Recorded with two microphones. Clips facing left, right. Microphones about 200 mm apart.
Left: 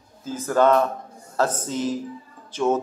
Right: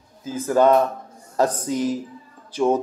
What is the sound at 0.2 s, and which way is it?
A man's voice, 10° right (ahead or behind).